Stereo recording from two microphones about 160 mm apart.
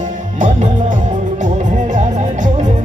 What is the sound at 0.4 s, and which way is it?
Music, 50° right (ahead or behind).